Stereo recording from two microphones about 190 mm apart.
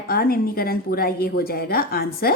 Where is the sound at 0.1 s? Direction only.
50° left (ahead or behind).